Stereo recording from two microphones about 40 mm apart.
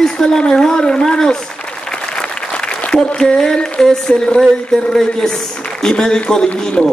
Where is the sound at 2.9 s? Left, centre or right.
Centre.